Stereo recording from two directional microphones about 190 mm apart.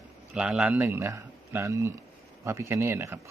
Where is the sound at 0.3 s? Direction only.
5° right (ahead or behind).